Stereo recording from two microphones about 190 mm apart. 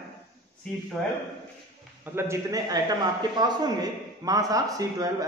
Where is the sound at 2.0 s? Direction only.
15° right (ahead or behind).